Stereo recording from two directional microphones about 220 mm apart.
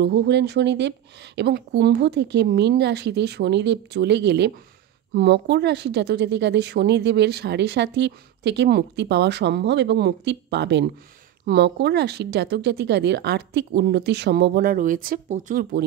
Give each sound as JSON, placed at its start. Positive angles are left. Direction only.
{"t": 0.0, "sound": "a woman's voice", "side_deg": -50}